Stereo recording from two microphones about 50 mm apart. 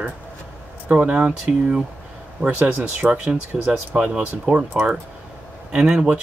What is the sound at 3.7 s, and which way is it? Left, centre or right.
Speech, centre.